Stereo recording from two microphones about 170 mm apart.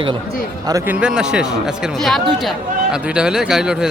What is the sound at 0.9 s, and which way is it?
Speech, 5° right (ahead or behind).